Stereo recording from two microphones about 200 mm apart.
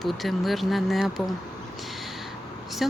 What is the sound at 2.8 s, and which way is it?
Speech, centre (ahead or behind).